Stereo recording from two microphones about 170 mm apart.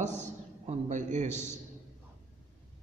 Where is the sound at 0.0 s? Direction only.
45° right (ahead or behind).